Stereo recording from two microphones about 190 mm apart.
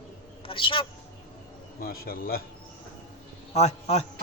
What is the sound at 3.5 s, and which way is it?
Speech, 35° left (ahead or behind).